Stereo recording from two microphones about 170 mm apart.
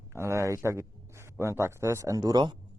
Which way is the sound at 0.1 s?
15° right (ahead or behind).